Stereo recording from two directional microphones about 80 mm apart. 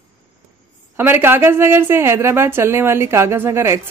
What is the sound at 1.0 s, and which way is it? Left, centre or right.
A woman's voice, right.